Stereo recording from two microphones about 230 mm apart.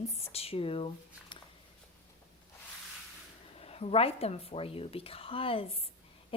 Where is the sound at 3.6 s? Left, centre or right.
Left.